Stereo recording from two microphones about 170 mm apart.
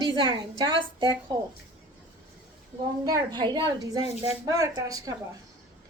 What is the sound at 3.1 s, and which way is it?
A woman's voice, 25° right (ahead or behind).